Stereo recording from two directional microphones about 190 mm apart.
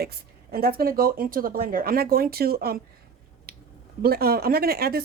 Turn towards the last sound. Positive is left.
turn(degrees=-55)  # may be behind; listen again after turning